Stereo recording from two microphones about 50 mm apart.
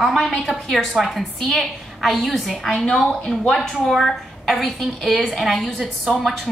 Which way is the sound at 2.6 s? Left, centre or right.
Left.